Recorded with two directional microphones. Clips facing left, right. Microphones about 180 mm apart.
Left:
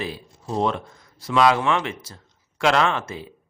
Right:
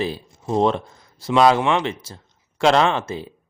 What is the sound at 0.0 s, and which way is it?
A man's voice, 25° right (ahead or behind).